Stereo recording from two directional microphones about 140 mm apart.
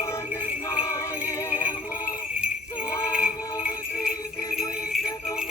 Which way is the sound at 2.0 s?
10° right (ahead or behind).